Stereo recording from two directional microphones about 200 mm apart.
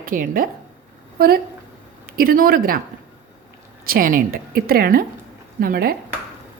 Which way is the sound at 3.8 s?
45° right (ahead or behind).